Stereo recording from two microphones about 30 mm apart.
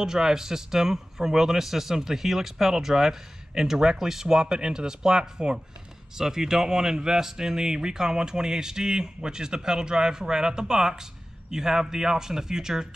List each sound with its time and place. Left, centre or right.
0.0 s speech: centre